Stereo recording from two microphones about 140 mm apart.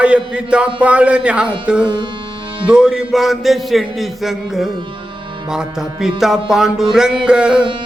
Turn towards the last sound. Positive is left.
turn(degrees=-5)  # may be behind; listen again after turning